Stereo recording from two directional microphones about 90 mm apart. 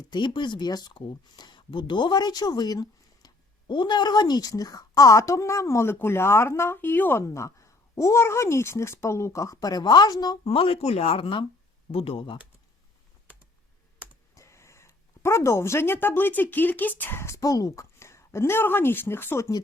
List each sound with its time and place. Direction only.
0.1 s speech: 60° left (ahead or behind); by 3.3 s 45° left (ahead or behind)
3.7 s a woman's voice: 60° left (ahead or behind)
10.4 s speech: 90° left
14.3 s speech: 35° left (ahead or behind)